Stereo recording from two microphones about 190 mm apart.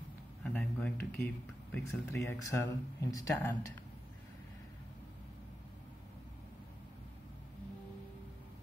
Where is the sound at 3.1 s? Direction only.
20° left (ahead or behind).